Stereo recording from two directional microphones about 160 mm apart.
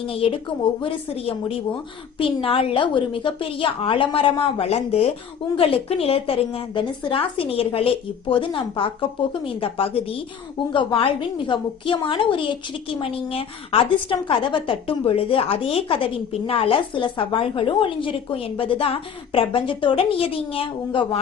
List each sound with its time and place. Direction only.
0.0 s a woman's voice: 35° left (ahead or behind)